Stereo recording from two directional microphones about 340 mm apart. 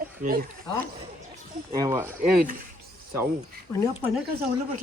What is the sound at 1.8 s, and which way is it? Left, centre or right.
Speech, centre.